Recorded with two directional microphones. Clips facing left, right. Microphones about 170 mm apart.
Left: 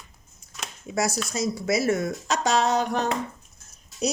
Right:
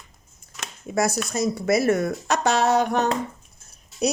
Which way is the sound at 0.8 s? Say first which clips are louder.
Right 3 dB; 55° right (ahead or behind).